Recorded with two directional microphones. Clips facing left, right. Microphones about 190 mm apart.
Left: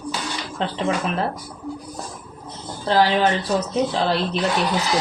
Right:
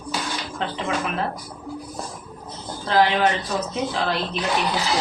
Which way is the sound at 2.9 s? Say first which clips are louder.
Left 1 dB; 35° left (ahead or behind).